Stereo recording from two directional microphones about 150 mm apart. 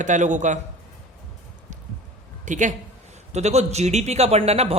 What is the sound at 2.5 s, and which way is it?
Speech, 55° right (ahead or behind).